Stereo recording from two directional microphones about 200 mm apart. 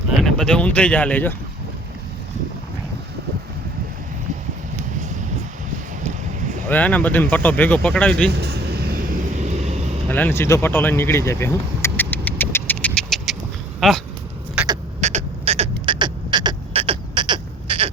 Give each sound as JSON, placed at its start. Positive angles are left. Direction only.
{"t": 0.2, "sound": "speech", "side_deg": 5}
{"t": 6.7, "sound": "speech", "side_deg": 10}
{"t": 8.3, "sound": "vehicle", "side_deg": -55}
{"t": 10.1, "sound": "vehicle", "side_deg": 10}
{"t": 13.7, "sound": "speech", "side_deg": 0}
{"t": 15.0, "sound": "creak", "side_deg": -35}